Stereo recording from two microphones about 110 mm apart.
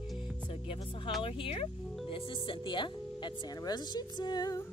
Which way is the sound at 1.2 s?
55° left (ahead or behind).